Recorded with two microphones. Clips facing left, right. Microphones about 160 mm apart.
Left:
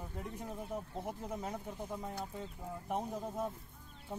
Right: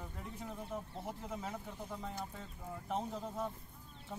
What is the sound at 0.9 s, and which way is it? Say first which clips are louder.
Speech: left 3 dB; 20° left (ahead or behind).